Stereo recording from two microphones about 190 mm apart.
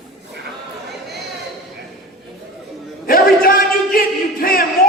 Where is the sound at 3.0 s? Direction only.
50° left (ahead or behind).